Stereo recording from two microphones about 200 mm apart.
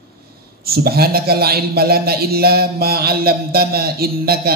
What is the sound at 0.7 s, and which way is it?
A man's voice, 50° right (ahead or behind).